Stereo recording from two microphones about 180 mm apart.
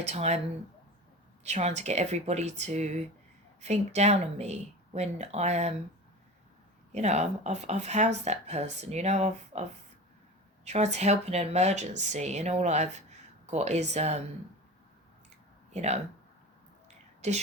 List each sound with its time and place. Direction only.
0.1 s speech: 35° right (ahead or behind)
1.5 s speech: 40° right (ahead or behind)
6.9 s speech: 40° right (ahead or behind)
15.7 s speech: 40° right (ahead or behind)
17.2 s speech: 40° right (ahead or behind)